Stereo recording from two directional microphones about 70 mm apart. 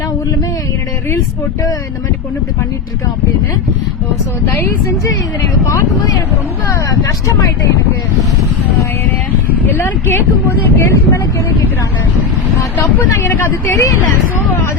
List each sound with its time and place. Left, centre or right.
5.6 s speech: left
6.7 s speech: left
9.6 s speech: left
13.2 s speech: left